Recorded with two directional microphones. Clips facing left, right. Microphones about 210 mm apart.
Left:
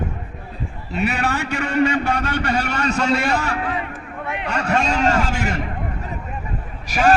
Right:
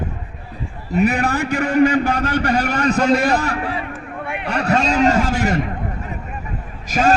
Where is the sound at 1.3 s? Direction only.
35° right (ahead or behind).